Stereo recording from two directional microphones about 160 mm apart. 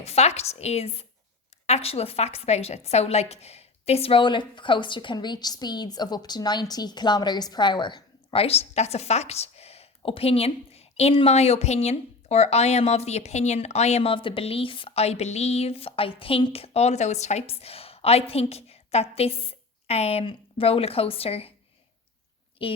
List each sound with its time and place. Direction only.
0.0 s a woman's voice: 40° left (ahead or behind)
22.6 s a woman's voice: 35° left (ahead or behind)